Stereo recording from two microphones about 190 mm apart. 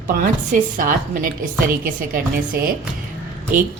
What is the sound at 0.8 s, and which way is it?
A woman's voice, 45° right (ahead or behind).